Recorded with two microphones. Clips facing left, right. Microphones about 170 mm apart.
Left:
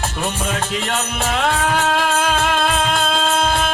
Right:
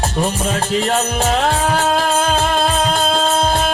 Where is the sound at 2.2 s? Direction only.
35° right (ahead or behind).